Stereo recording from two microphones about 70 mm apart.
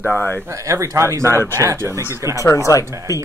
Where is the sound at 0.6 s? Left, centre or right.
Right.